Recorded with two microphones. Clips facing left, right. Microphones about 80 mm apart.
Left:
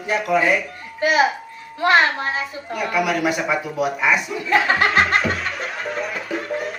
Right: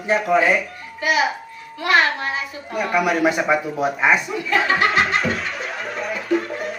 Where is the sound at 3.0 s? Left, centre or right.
Right.